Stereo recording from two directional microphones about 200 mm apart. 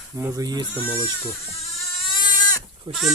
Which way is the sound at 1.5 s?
25° left (ahead or behind).